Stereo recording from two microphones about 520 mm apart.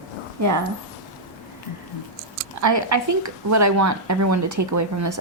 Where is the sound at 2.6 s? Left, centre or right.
Right.